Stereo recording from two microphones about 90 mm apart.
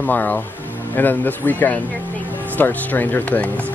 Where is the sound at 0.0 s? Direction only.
15° left (ahead or behind).